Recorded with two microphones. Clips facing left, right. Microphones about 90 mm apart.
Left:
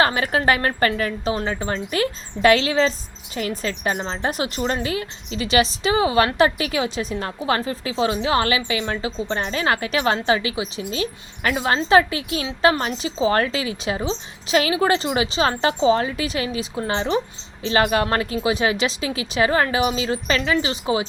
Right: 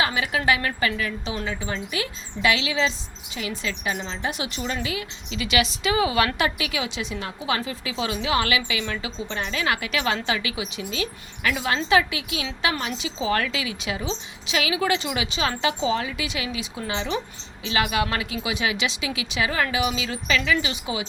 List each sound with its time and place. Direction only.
0.0 s speech: 45° left (ahead or behind)